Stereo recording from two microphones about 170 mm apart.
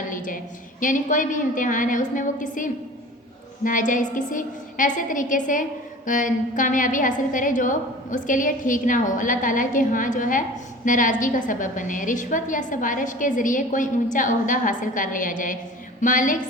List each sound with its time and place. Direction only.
0.1 s a woman's voice: 50° left (ahead or behind)